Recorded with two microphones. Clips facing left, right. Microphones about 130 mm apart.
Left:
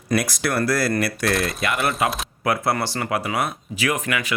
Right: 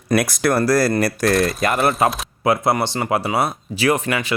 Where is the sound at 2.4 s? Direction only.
25° right (ahead or behind).